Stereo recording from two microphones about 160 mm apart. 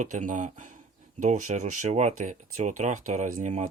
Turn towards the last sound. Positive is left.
turn(degrees=-45)  # may be behind; listen again after turning